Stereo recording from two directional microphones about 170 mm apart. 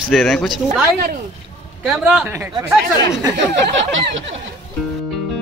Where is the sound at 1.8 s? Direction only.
5° right (ahead or behind).